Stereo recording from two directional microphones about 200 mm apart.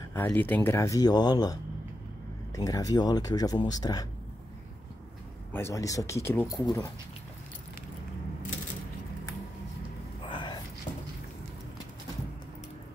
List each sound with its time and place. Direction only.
0.1 s speech: 10° left (ahead or behind)
5.5 s speech: 15° left (ahead or behind)
10.3 s a sound: 25° left (ahead or behind)